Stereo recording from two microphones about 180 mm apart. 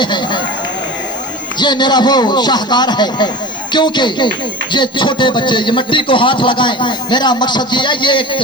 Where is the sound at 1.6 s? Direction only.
25° left (ahead or behind).